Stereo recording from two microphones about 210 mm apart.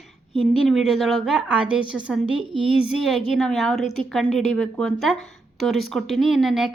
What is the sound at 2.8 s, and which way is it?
Speech, centre (ahead or behind).